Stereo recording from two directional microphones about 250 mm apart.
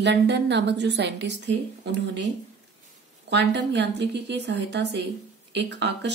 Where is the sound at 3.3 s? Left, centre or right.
Right.